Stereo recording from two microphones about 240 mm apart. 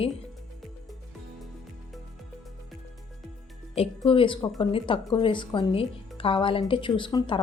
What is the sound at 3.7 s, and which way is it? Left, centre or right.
A woman's voice, left.